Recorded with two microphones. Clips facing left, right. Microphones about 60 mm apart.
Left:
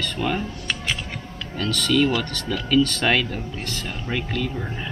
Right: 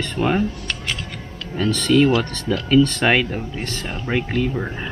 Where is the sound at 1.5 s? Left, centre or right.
Right.